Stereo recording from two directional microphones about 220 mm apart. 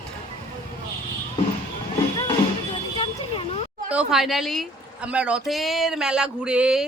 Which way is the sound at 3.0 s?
25° left (ahead or behind).